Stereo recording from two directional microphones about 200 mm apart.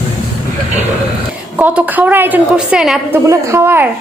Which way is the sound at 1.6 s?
10° right (ahead or behind).